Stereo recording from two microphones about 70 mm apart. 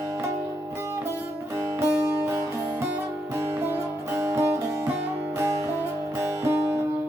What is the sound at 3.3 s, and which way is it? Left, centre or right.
Music, right.